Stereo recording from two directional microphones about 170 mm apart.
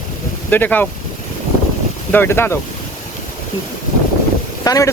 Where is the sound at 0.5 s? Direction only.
10° left (ahead or behind).